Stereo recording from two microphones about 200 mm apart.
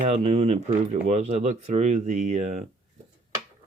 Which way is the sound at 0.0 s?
30° right (ahead or behind).